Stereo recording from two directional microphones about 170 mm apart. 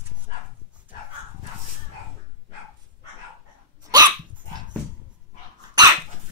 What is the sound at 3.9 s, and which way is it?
Dog, 25° right (ahead or behind).